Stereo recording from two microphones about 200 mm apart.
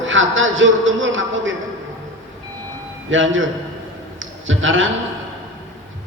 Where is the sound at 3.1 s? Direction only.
75° right (ahead or behind).